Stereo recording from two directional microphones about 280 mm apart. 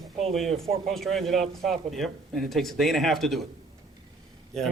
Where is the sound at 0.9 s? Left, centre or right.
Centre.